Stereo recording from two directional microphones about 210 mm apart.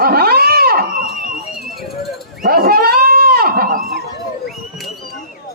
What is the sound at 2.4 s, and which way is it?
Goat, 45° right (ahead or behind).